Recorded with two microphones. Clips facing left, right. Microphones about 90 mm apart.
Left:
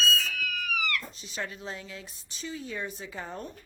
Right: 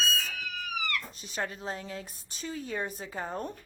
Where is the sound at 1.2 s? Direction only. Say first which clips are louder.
Right 2 dB; 45° right (ahead or behind).